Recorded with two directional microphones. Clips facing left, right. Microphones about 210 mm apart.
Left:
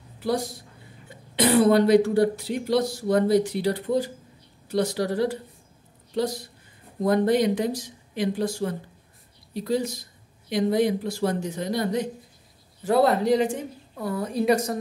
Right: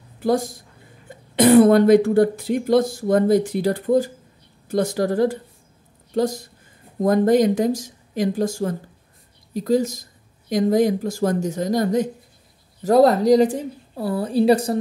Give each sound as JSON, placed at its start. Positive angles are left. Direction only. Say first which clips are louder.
{"t": 0.2, "sound": "a woman's voice", "louder": "right 6 dB", "side_deg": -50}